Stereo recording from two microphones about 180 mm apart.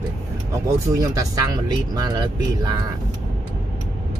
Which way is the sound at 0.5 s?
20° right (ahead or behind).